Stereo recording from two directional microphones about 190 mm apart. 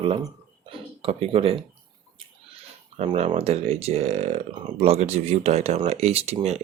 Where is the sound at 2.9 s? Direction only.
35° right (ahead or behind).